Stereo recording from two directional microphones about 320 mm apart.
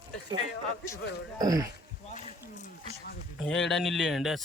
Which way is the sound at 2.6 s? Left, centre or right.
Left.